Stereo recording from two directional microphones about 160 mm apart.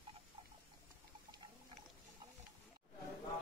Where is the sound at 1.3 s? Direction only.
30° right (ahead or behind).